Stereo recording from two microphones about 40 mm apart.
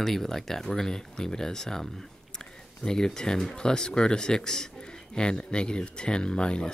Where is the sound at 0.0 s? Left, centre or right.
Centre.